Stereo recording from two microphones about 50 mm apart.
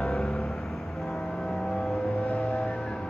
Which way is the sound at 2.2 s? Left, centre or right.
Left.